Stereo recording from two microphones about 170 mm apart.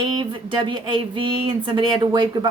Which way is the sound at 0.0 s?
30° right (ahead or behind).